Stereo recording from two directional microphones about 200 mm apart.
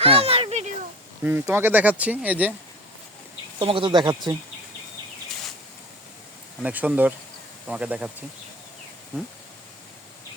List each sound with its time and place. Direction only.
0.0 s a sound: 30° right (ahead or behind)
1.2 s speech: 10° right (ahead or behind)
3.6 s speech: 25° right (ahead or behind)
6.6 s speech: 5° right (ahead or behind)